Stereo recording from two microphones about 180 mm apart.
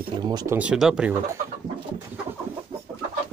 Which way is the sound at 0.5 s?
5° right (ahead or behind).